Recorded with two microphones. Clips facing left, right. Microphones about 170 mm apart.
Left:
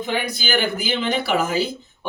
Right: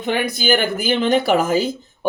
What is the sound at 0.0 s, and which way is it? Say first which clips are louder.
Speech: right 4 dB; 55° right (ahead or behind).